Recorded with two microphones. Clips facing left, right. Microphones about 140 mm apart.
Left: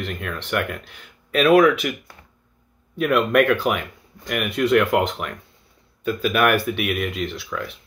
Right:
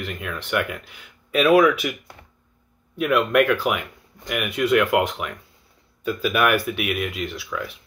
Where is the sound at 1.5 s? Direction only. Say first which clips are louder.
Left 2 dB; 45° left (ahead or behind).